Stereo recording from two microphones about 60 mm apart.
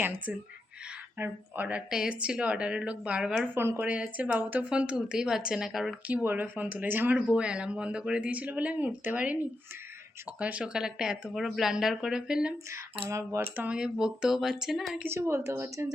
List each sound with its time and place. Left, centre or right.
0.0 s speech: right
1.7 s speech: centre
3.5 s speech: right
4.2 s speech: right
4.7 s speech: centre
6.2 s speech: right
10.4 s speech: centre
12.7 s speech: right
13.7 s speech: centre
15.2 s a woman's voice: right
15.5 s speech: right